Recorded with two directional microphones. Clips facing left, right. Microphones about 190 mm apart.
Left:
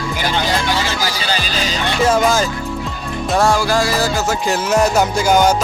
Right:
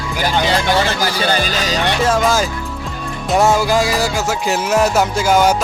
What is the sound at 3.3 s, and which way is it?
Music, 20° right (ahead or behind).